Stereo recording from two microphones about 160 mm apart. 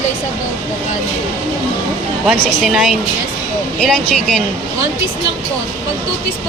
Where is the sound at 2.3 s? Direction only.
Centre (ahead or behind).